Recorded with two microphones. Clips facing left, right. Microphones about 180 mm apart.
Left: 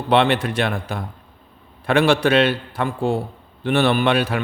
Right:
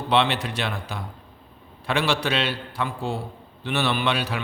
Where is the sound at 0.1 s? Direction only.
55° left (ahead or behind).